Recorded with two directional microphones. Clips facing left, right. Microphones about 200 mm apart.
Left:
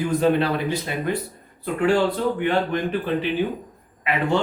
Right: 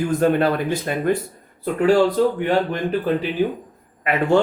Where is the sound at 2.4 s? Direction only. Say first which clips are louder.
Right 2 dB; 40° right (ahead or behind).